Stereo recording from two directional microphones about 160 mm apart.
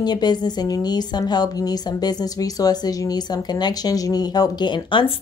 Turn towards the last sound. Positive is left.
turn(degrees=30)  # may be behind; listen again after turning